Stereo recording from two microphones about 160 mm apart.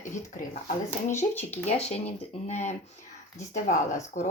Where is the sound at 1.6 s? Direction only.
45° left (ahead or behind).